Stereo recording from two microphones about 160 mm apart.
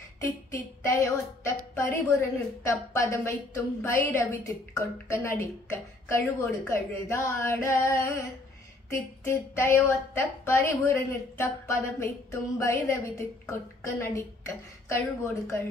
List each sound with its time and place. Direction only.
0.8 s a woman's voice: 20° left (ahead or behind)